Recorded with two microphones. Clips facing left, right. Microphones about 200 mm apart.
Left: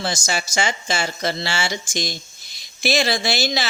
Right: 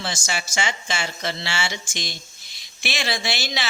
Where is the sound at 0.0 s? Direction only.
40° left (ahead or behind).